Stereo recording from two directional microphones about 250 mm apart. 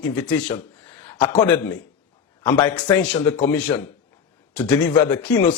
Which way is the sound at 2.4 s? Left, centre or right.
Centre.